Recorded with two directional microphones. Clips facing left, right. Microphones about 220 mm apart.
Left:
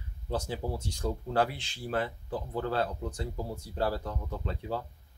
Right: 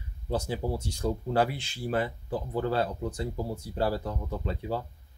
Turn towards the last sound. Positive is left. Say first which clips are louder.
# right 3 dB
turn(degrees=-10)  # may be behind; listen again after turning